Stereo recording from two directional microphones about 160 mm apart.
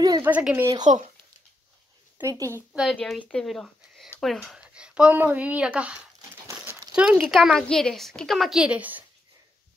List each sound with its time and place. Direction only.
0.2 s speech: 10° right (ahead or behind)
0.7 s speech: 25° right (ahead or behind)
2.1 s speech: 20° right (ahead or behind)
2.7 s a woman's voice: 5° right (ahead or behind)
6.4 s crumpling: 15° right (ahead or behind)
7.0 s a woman's voice: 5° right (ahead or behind)